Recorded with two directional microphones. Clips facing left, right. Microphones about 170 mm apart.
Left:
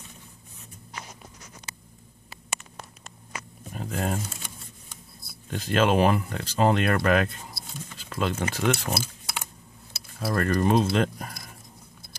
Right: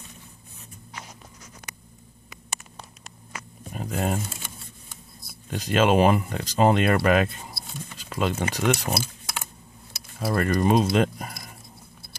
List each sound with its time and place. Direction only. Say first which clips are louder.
3.7 s speech: right 2 dB; 15° right (ahead or behind)
5.5 s speech: right 2 dB; 15° right (ahead or behind)
10.1 s speech: right 1 dB; 10° right (ahead or behind)